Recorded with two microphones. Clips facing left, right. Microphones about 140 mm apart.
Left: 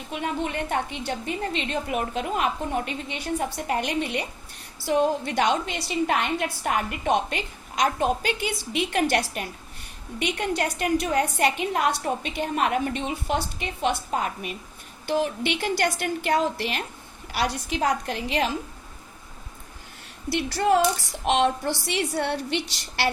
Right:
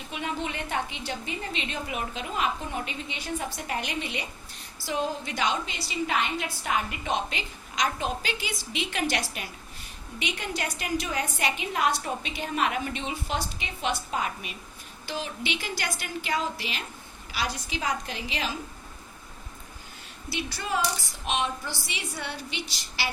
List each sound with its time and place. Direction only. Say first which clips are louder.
0.1 s a woman's voice: left 4 dB; 50° left (ahead or behind)
15.0 s a woman's voice: left 8 dB; 60° left (ahead or behind)
20.3 s a woman's voice: left 9 dB; 65° left (ahead or behind)